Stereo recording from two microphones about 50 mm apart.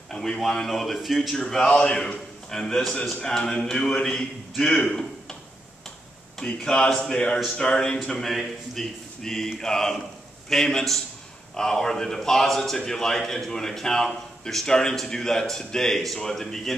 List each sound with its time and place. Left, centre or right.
0.1 s speech: centre
1.3 s a man's voice: centre
6.6 s a man's voice: centre
8.2 s a man's voice: centre